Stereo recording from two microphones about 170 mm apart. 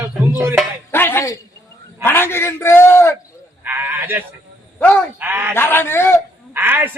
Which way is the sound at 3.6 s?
10° right (ahead or behind).